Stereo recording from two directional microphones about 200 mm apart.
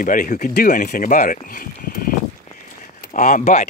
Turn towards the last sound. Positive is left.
turn(degrees=35)  # may be behind; listen again after turning